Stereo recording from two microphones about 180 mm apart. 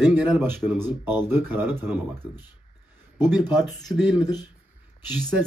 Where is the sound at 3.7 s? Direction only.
Centre (ahead or behind).